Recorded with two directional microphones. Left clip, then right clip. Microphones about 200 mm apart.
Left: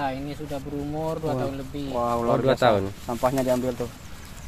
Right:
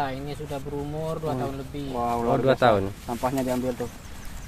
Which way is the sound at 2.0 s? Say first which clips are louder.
Left 2 dB; 45° left (ahead or behind).